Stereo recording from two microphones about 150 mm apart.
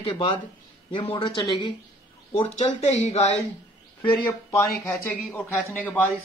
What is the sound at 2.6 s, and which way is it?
Speech, 45° left (ahead or behind).